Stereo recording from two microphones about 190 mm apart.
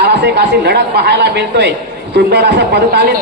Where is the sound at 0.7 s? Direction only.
60° right (ahead or behind).